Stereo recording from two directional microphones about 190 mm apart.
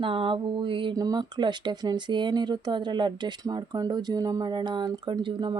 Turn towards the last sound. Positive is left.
turn(degrees=-25)  # may be behind; listen again after turning